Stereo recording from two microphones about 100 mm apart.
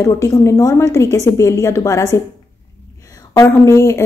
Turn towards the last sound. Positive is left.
turn(degrees=30)  # may be behind; listen again after turning